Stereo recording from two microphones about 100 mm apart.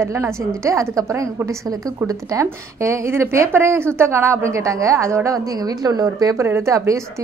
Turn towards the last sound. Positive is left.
turn(degrees=-30)  # may be behind; listen again after turning